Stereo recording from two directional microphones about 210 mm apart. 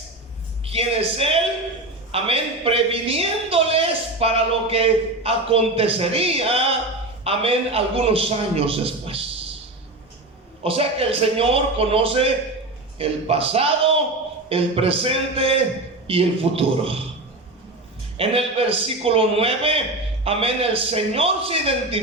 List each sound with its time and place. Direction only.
0.6 s a woman's voice: 25° right (ahead or behind)
10.6 s a woman's voice: 25° right (ahead or behind)
18.2 s a woman's voice: 25° right (ahead or behind)